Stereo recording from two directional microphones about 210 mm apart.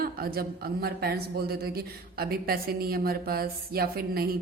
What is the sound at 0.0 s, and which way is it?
A woman's voice, 45° right (ahead or behind).